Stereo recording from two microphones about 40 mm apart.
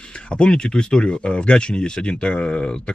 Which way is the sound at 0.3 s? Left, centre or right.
Left.